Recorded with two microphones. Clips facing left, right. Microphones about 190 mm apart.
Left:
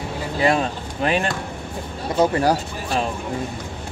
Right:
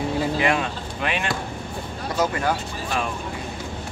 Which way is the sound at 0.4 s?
35° left (ahead or behind).